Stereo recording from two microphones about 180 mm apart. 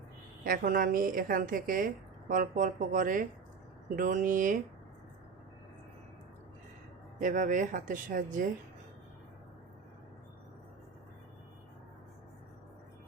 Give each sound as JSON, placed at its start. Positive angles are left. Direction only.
{"t": 0.4, "sound": "a woman's voice", "side_deg": -55}
{"t": 7.2, "sound": "a woman's voice", "side_deg": -45}